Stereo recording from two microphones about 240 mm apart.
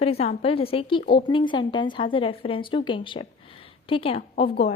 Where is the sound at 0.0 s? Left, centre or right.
Left.